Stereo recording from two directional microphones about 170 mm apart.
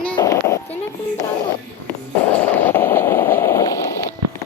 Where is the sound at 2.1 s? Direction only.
10° left (ahead or behind).